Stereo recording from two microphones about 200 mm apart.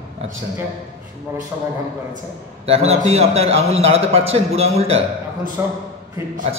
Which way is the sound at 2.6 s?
30° right (ahead or behind).